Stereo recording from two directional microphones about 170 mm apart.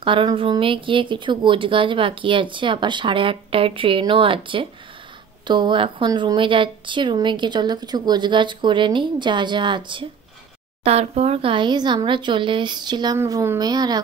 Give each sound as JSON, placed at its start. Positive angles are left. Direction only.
{"t": 0.0, "sound": "speech", "side_deg": -30}